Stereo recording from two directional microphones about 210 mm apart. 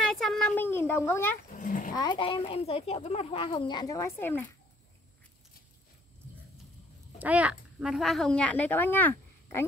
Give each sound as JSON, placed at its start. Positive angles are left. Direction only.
{"t": 0.1, "sound": "a sound", "side_deg": 0}
{"t": 1.5, "sound": "speech", "side_deg": 40}
{"t": 2.0, "sound": "speech", "side_deg": 20}
{"t": 7.2, "sound": "a woman's voice", "side_deg": -5}